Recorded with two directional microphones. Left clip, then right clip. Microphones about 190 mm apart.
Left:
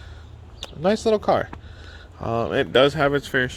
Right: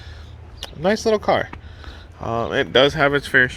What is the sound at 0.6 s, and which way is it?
Speech, 15° left (ahead or behind).